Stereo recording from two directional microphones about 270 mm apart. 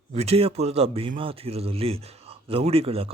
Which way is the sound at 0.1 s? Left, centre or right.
Right.